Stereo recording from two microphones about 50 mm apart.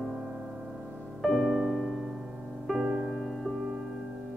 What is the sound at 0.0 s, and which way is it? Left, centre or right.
Music, centre.